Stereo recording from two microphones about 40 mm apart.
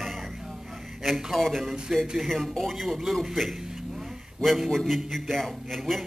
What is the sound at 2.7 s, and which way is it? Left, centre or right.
Speech, centre.